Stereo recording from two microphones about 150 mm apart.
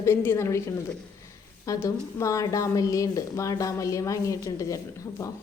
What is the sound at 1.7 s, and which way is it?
Speech, 20° left (ahead or behind).